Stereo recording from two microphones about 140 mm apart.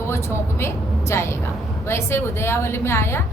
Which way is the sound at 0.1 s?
20° left (ahead or behind).